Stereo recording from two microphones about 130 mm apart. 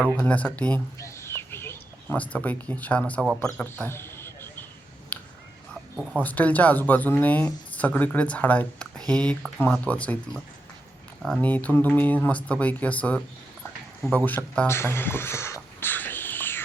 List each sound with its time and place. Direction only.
0.0 s speech: 10° left (ahead or behind)
0.9 s speech: 20° left (ahead or behind)
3.4 s a sound: 10° left (ahead or behind)
6.2 s speech: 10° left (ahead or behind)
11.4 s speech: 10° left (ahead or behind)
14.3 s speech: 10° left (ahead or behind)
14.7 s a sound: 20° left (ahead or behind)